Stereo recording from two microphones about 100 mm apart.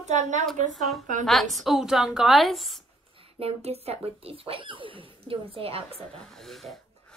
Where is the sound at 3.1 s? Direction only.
70° right (ahead or behind); by 4.0 s 90° right.